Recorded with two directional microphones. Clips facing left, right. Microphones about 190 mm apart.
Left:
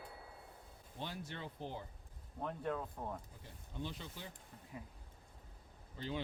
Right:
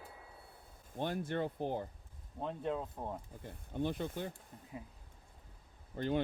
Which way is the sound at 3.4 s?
55° right (ahead or behind).